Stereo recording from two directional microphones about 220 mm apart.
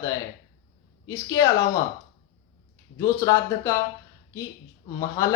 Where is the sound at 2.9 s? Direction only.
15° left (ahead or behind).